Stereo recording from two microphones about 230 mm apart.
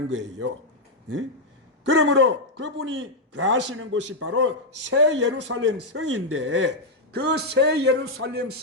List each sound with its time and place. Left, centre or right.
0.1 s a man's voice: right
1.8 s a man's voice: right